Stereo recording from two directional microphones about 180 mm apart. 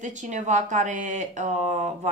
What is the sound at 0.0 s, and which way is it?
Speech, 40° right (ahead or behind).